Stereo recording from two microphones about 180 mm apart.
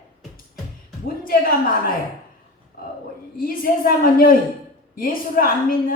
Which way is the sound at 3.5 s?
55° left (ahead or behind).